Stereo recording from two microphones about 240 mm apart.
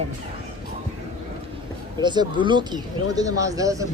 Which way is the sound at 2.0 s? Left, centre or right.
Centre.